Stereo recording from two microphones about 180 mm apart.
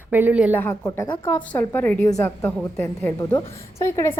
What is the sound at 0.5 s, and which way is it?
Speech, 15° left (ahead or behind).